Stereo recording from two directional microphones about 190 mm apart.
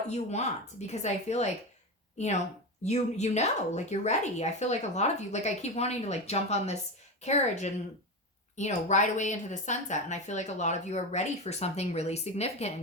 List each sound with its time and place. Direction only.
0.1 s speech: 35° left (ahead or behind)